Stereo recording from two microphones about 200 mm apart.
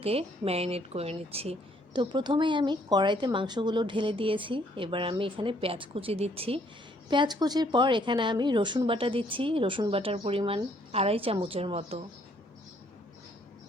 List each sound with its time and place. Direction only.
0.0 s a woman's voice: 30° right (ahead or behind)